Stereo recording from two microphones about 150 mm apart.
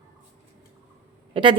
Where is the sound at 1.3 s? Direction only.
35° right (ahead or behind).